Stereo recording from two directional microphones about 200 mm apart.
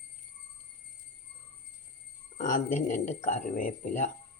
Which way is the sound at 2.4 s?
40° left (ahead or behind).